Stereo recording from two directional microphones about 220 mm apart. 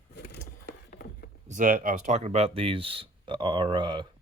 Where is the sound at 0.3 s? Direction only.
50° left (ahead or behind).